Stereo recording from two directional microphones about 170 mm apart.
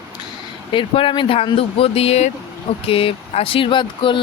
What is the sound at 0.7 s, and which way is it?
Speech, 30° left (ahead or behind).